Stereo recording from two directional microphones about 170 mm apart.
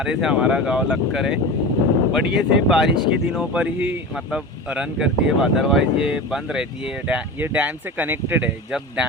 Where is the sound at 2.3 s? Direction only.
80° right.